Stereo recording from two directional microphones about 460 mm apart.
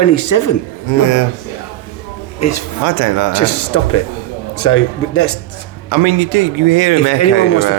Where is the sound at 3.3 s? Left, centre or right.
Left.